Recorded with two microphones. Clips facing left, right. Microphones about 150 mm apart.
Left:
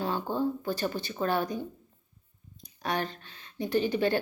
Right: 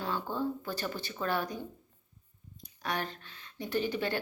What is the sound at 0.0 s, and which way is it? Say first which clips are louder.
Speech: left 4 dB; 25° left (ahead or behind).